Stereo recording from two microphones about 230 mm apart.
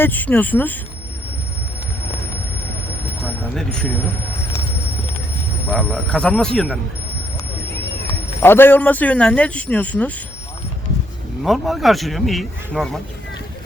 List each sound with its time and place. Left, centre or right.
0.0 s speech: centre
3.5 s speech: centre
5.7 s speech: centre
8.4 s speech: centre
11.4 s speech: centre